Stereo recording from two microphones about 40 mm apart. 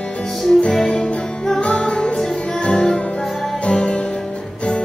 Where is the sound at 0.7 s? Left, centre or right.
Left.